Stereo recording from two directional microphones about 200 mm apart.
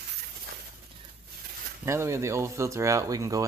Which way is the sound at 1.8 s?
15° right (ahead or behind).